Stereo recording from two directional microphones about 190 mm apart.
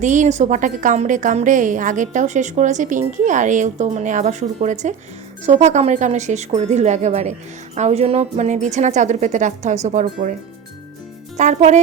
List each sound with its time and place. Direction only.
0.0 s a woman's voice: 40° right (ahead or behind)
11.3 s a woman's voice: 40° right (ahead or behind)